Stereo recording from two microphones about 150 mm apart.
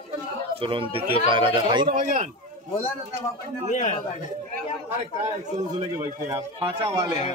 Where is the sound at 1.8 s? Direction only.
60° right (ahead or behind).